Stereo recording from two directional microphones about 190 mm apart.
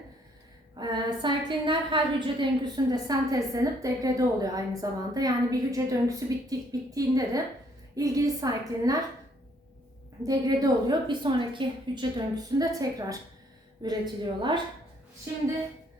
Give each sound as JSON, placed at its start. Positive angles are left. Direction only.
{"t": 0.8, "sound": "a woman's voice", "side_deg": -20}
{"t": 10.2, "sound": "a woman's voice", "side_deg": -20}